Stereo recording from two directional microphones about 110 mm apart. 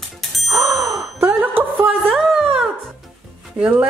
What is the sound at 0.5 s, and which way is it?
Music, 30° right (ahead or behind).